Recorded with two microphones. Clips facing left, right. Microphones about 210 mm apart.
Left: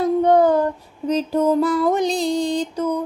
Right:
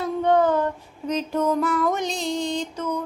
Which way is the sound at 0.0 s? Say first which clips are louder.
Left 5 dB; 40° left (ahead or behind).